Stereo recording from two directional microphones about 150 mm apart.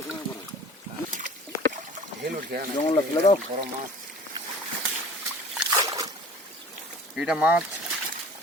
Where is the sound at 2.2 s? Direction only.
80° right.